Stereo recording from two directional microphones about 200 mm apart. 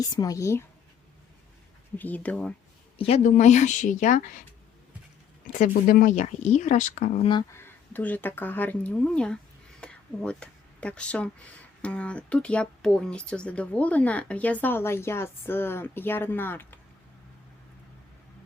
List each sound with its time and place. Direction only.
0.0 s speech: 20° left (ahead or behind)
2.0 s speech: 10° left (ahead or behind)
3.0 s speech: 35° left (ahead or behind)
5.5 s speech: 40° left (ahead or behind)
7.3 s speech: 15° left (ahead or behind)
9.8 s a sound: 5° left (ahead or behind)
11.8 s speech: 5° left (ahead or behind)